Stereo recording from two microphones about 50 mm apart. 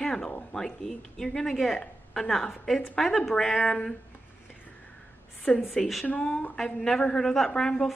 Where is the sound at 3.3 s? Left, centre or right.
Centre.